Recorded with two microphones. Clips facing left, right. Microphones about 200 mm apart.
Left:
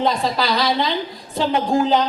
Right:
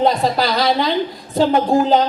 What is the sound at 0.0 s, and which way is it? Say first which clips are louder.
A woman's voice: right 4 dB; 40° right (ahead or behind).